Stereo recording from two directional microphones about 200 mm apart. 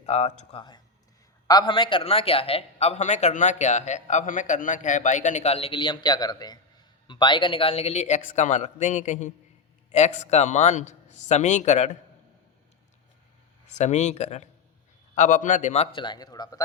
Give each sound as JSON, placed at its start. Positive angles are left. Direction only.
{"t": 0.0, "sound": "a man's voice", "side_deg": 35}
{"t": 1.5, "sound": "a man's voice", "side_deg": 20}
{"t": 13.7, "sound": "a man's voice", "side_deg": 35}